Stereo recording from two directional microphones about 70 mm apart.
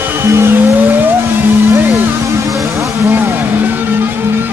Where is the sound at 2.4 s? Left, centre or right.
Right.